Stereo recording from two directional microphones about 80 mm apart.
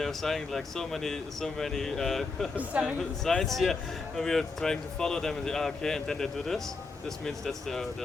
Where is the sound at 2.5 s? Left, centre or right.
Centre.